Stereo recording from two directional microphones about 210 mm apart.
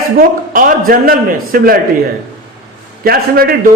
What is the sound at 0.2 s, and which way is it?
A man's voice, 40° right (ahead or behind).